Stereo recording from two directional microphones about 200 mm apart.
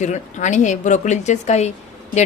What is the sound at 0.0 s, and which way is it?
A woman's voice, 35° left (ahead or behind).